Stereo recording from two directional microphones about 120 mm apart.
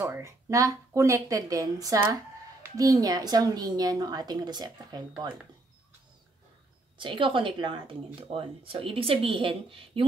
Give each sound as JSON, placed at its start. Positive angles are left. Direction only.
{"t": 0.0, "sound": "a woman's voice", "side_deg": -20}
{"t": 7.0, "sound": "speech", "side_deg": -45}